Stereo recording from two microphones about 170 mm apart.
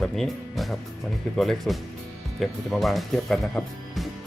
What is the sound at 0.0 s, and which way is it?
Speech, centre (ahead or behind).